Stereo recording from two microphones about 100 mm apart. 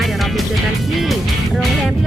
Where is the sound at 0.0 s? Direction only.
Centre (ahead or behind).